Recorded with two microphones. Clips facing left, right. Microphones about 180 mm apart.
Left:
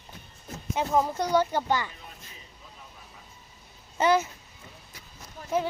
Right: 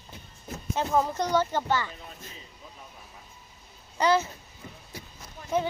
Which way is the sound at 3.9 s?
20° left (ahead or behind).